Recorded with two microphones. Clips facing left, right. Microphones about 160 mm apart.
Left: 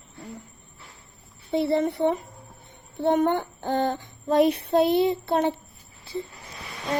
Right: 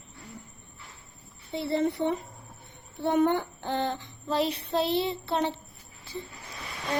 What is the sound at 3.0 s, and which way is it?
Child singing, 50° left (ahead or behind).